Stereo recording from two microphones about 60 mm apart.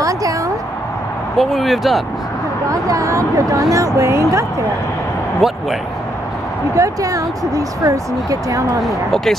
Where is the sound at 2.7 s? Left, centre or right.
Right.